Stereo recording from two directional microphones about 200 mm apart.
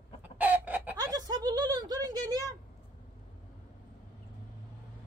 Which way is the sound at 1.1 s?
20° right (ahead or behind).